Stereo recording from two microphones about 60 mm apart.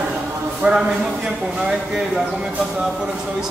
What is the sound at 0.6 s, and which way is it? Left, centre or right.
Speech, right.